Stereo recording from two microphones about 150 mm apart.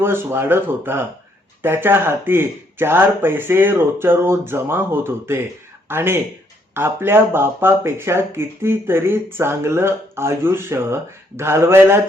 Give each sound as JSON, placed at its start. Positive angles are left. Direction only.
{"t": 0.0, "sound": "speech", "side_deg": -15}